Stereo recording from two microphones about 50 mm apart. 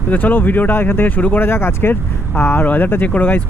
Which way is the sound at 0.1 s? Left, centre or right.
Left.